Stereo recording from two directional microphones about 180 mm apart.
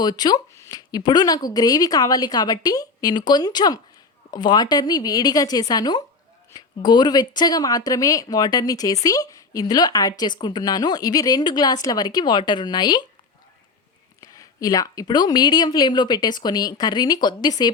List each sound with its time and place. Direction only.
0.0 s a woman's voice: 20° left (ahead or behind)
14.2 s a woman's voice: 20° left (ahead or behind)